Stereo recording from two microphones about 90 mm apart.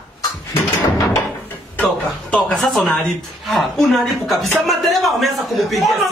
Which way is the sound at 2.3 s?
5° left (ahead or behind).